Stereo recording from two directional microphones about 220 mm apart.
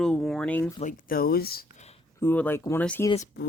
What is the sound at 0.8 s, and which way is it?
Speech, 40° left (ahead or behind).